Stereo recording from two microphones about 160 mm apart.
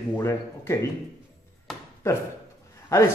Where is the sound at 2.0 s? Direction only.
15° left (ahead or behind).